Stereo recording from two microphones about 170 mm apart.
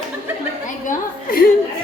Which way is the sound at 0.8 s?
60° left (ahead or behind).